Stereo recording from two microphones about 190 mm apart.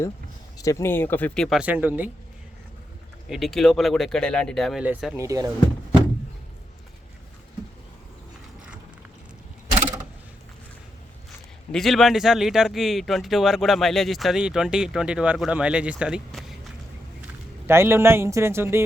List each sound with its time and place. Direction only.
0.6 s speech: 15° left (ahead or behind); by 2.0 s 10° right (ahead or behind)
3.2 s speech: centre (ahead or behind)
5.1 s speech: 15° right (ahead or behind)
11.7 s speech: centre (ahead or behind)
17.7 s speech: 15° right (ahead or behind)